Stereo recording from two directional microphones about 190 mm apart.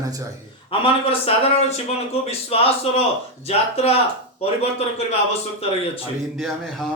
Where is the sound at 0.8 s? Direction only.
30° left (ahead or behind).